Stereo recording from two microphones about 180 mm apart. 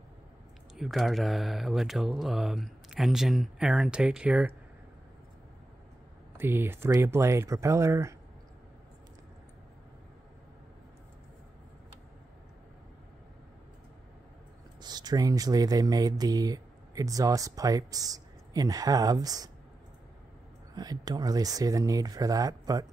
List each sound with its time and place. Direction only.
0.7 s speech: centre (ahead or behind)
6.3 s speech: 10° right (ahead or behind)
14.8 s speech: 20° right (ahead or behind)
20.7 s speech: 20° right (ahead or behind)